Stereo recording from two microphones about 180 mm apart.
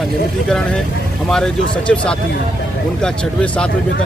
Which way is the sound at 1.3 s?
5° left (ahead or behind).